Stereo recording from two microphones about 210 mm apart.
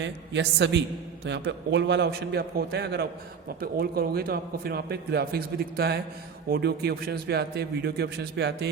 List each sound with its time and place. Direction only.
0.0 s a man's voice: 55° right (ahead or behind)